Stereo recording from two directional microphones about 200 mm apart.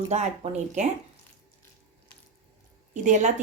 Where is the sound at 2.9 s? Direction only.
35° right (ahead or behind).